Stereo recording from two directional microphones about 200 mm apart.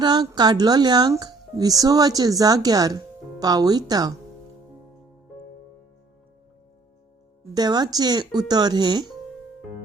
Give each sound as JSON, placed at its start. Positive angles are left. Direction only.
{"t": 0.0, "sound": "speech", "side_deg": -20}
{"t": 7.5, "sound": "speech", "side_deg": -20}